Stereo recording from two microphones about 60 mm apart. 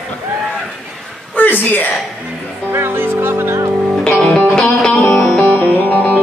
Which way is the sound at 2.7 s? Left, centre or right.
Right.